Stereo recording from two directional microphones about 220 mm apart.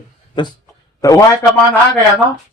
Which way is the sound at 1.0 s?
15° left (ahead or behind).